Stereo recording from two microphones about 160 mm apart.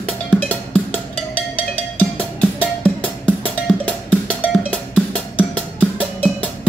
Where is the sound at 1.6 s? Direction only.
10° left (ahead or behind).